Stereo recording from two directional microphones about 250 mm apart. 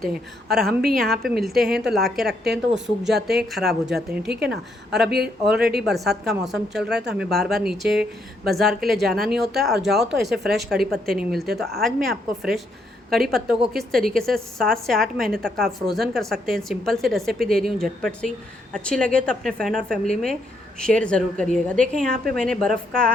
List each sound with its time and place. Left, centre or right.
0.5 s a woman's voice: centre
4.3 s a woman's voice: right
5.5 s a woman's voice: centre